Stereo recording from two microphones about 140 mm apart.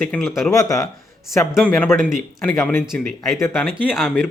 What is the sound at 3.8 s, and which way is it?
Speech, 5° right (ahead or behind).